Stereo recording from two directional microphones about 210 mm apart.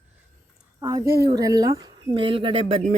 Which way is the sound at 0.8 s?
15° right (ahead or behind).